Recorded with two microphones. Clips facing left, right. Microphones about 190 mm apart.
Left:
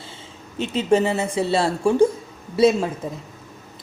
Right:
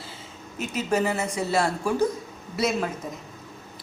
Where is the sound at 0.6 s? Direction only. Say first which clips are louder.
Left 6 dB; 30° left (ahead or behind).